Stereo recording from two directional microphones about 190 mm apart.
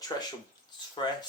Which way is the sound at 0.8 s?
25° left (ahead or behind).